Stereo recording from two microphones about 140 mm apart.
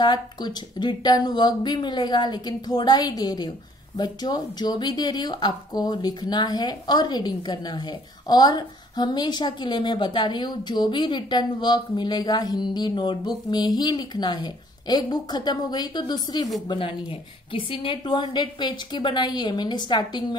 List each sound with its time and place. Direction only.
0.0 s a woman's voice: 30° left (ahead or behind)